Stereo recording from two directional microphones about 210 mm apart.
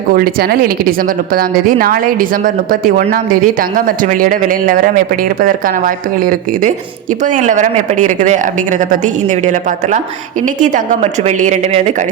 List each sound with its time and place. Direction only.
0.1 s a woman's voice: 45° right (ahead or behind)